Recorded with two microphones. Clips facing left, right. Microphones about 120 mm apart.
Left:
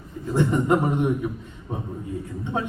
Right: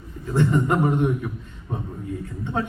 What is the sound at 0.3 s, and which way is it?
Speech, 15° left (ahead or behind).